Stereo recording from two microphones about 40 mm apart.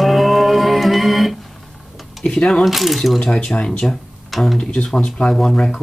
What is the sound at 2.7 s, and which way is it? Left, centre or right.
Speech, centre.